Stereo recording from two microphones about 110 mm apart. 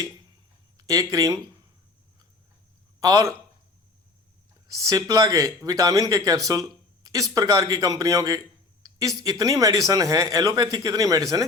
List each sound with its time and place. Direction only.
0.8 s speech: 35° right (ahead or behind)
3.0 s speech: 30° right (ahead or behind)
4.7 s speech: 30° right (ahead or behind)